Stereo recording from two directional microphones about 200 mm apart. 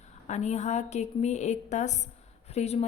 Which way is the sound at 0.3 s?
35° left (ahead or behind).